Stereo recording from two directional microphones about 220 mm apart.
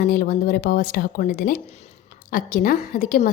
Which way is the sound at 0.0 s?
40° left (ahead or behind).